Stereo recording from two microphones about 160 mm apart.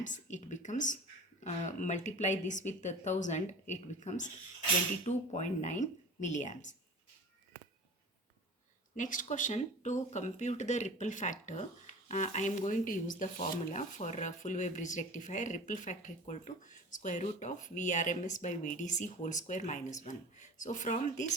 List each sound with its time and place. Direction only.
0.0 s speech: 50° left (ahead or behind)
9.0 s speech: 55° left (ahead or behind)